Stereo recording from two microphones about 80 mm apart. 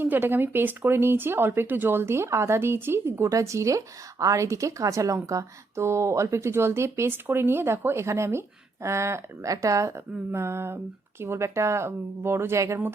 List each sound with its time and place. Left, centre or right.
0.0 s speech: right